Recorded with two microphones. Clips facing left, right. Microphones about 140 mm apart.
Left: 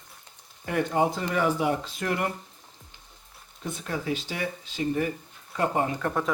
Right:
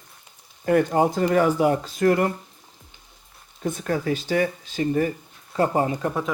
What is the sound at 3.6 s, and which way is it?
Speech, 45° right (ahead or behind).